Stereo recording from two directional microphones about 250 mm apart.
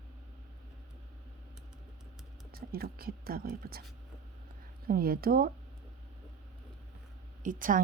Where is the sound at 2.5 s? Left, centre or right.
Right.